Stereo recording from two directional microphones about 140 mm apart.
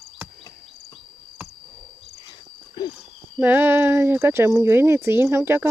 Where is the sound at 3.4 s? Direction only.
15° right (ahead or behind).